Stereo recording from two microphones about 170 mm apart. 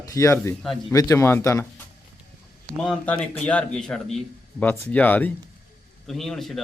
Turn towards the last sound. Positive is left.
turn(degrees=0)  # may be behind; listen again after turning